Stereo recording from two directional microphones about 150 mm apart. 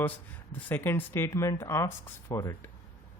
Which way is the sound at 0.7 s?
15° left (ahead or behind).